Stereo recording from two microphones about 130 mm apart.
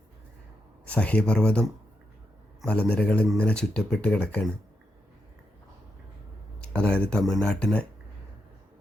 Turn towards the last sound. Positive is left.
turn(degrees=5)  # may be behind; listen again after turning